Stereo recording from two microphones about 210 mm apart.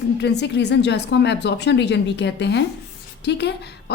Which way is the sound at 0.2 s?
55° left (ahead or behind).